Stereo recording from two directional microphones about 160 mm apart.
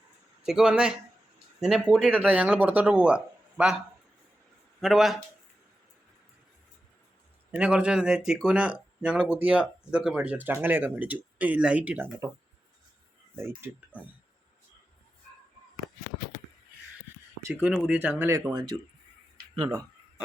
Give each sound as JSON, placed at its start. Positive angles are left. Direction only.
{"t": 0.4, "sound": "speech", "side_deg": -5}
{"t": 4.8, "sound": "speech", "side_deg": 0}
{"t": 7.5, "sound": "speech", "side_deg": -5}
{"t": 13.9, "sound": "speech", "side_deg": 10}
{"t": 17.5, "sound": "speech", "side_deg": -5}